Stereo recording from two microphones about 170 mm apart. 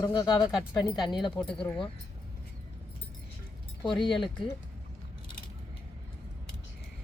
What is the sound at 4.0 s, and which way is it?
Speech, 30° left (ahead or behind).